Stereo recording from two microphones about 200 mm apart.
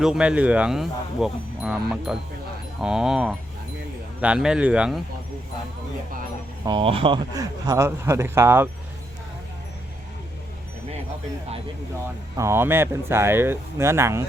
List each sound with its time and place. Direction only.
0.0 s speech: 5° right (ahead or behind)
6.7 s a man's voice: 25° right (ahead or behind)
12.4 s a man's voice: 10° right (ahead or behind)